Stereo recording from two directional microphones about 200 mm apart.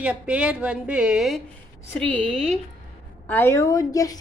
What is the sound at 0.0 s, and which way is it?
A woman's voice, 5° right (ahead or behind).